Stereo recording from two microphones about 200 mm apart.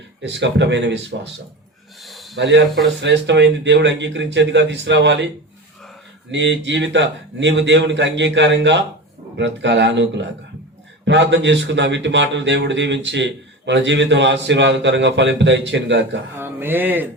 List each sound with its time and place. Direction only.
0.2 s a man's voice: 60° right (ahead or behind)
2.0 s snort: centre (ahead or behind)
2.3 s a man's voice: 60° right (ahead or behind)
6.3 s a man's voice: 65° right (ahead or behind)
16.4 s speech: 10° right (ahead or behind)